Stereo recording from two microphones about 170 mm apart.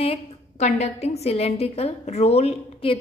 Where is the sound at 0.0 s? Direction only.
40° left (ahead or behind).